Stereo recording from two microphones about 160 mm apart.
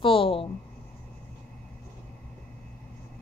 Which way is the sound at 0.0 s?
35° left (ahead or behind).